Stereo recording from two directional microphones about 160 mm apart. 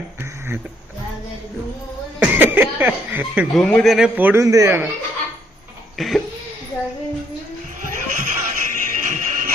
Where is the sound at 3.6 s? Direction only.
5° left (ahead or behind).